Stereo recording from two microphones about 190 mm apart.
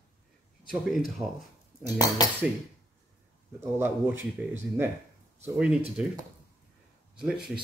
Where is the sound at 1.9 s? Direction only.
20° left (ahead or behind).